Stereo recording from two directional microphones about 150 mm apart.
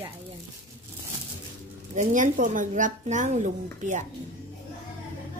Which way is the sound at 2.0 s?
60° right (ahead or behind).